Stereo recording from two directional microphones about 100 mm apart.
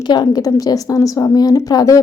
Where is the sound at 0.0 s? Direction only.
45° left (ahead or behind).